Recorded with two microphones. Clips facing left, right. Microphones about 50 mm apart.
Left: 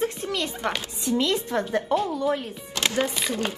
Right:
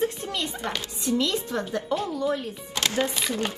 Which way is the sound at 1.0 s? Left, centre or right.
Left.